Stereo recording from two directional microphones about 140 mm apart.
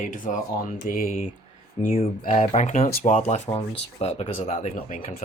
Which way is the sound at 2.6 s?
60° left (ahead or behind).